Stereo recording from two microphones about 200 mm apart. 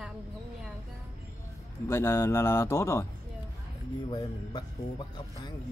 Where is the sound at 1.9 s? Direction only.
15° left (ahead or behind).